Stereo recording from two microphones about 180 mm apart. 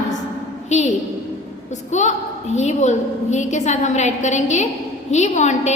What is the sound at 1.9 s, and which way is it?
A woman's voice, 40° left (ahead or behind).